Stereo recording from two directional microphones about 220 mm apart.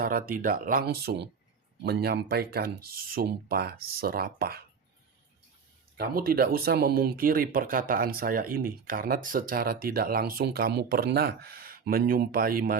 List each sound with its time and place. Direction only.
0.0 s speech: 40° right (ahead or behind)
6.0 s speech: 45° right (ahead or behind)